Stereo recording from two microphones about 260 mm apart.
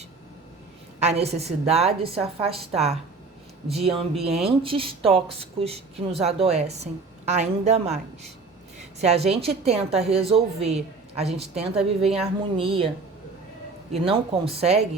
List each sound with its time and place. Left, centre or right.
0.9 s a woman's voice: right
9.0 s a woman's voice: right
13.9 s a woman's voice: right